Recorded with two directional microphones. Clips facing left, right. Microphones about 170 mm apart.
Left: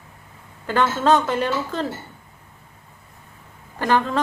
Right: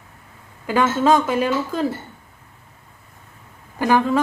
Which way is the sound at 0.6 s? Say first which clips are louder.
Right 2 dB; 5° right (ahead or behind).